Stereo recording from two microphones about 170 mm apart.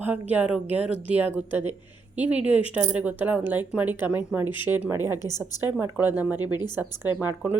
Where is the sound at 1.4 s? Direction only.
10° right (ahead or behind).